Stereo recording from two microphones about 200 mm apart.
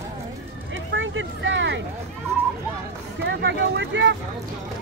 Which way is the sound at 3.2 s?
60° right (ahead or behind).